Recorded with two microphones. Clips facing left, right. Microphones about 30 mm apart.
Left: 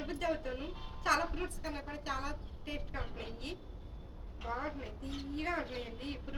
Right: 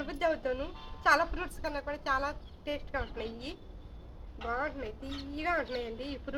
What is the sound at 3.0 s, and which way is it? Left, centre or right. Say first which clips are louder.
Speech: right 6 dB; right.